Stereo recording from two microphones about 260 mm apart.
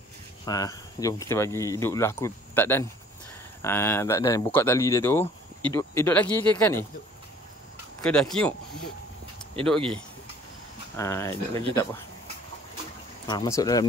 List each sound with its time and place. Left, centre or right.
0.5 s speech: centre
8.0 s speech: centre
9.6 s speech: right
11.0 s speech: centre
13.3 s speech: centre